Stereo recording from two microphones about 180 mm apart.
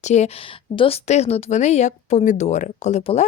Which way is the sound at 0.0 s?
40° left (ahead or behind).